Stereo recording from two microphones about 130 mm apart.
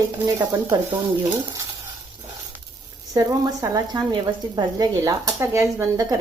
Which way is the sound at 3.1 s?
30° right (ahead or behind).